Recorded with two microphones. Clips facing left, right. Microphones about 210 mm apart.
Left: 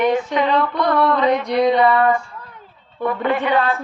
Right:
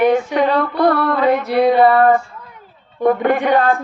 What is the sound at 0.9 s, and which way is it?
Speech, 45° right (ahead or behind).